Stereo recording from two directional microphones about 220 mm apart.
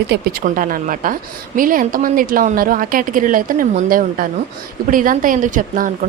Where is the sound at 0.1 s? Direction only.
45° right (ahead or behind).